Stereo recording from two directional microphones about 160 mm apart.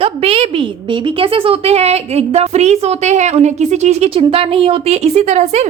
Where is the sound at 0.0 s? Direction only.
35° right (ahead or behind).